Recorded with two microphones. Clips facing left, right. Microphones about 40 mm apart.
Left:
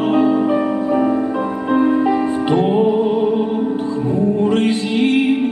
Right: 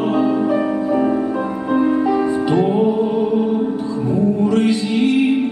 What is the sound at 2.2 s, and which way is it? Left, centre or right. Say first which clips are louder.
Music: even; left.